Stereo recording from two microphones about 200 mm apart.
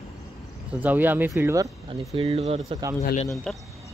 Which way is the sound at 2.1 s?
30° right (ahead or behind).